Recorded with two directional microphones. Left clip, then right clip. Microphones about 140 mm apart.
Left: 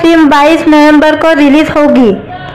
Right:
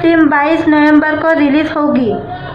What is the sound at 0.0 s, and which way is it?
Speech, 35° left (ahead or behind).